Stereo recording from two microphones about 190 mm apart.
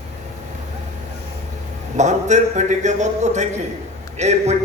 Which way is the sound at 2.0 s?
40° right (ahead or behind).